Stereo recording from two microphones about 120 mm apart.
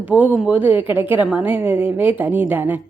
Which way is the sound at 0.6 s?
45° left (ahead or behind).